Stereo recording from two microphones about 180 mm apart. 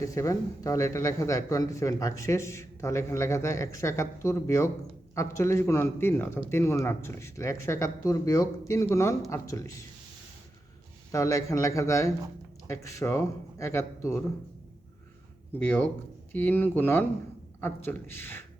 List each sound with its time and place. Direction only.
0.0 s speech: 15° left (ahead or behind)
11.1 s speech: 15° left (ahead or behind)
15.5 s speech: 10° left (ahead or behind)